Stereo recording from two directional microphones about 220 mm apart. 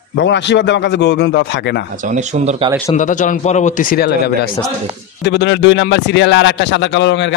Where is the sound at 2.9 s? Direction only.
35° left (ahead or behind).